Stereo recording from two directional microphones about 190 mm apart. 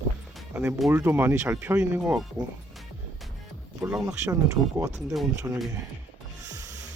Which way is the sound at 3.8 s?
10° right (ahead or behind).